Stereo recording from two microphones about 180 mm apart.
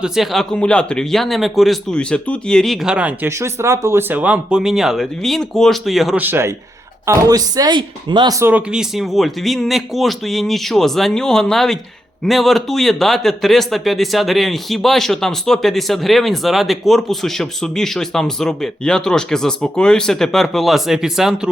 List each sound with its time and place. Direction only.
0.0 s a man's voice: centre (ahead or behind)
3.2 s a man's voice: 15° right (ahead or behind)
6.2 s a man's voice: 10° right (ahead or behind)